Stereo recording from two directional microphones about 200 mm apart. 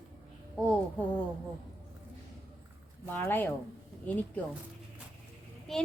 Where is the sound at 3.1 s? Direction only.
10° left (ahead or behind).